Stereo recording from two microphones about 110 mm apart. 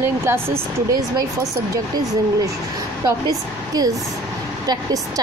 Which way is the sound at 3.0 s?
35° right (ahead or behind).